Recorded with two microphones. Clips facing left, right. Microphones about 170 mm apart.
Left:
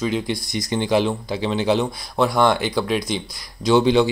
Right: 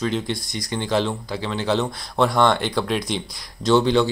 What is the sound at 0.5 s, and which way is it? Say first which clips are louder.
Speech: left 4 dB; 20° left (ahead or behind).